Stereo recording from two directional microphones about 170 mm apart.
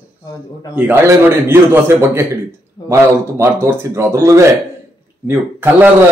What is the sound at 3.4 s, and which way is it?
A man's voice, 15° right (ahead or behind).